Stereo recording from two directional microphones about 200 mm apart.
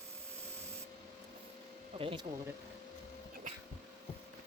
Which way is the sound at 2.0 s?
25° right (ahead or behind).